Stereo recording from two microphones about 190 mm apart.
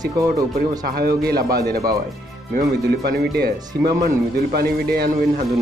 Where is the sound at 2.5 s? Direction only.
60° right (ahead or behind).